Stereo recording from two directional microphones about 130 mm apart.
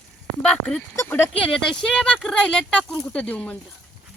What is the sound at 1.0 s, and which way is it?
Speech, 15° left (ahead or behind).